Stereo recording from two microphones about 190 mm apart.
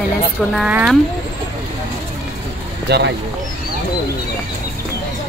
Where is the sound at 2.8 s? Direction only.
65° right (ahead or behind).